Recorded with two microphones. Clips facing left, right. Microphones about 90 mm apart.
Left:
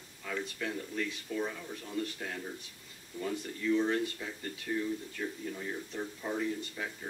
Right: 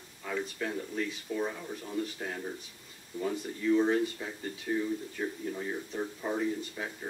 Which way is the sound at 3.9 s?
10° right (ahead or behind).